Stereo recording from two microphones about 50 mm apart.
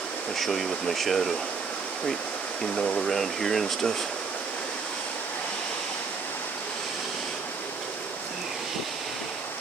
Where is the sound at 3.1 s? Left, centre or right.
Centre.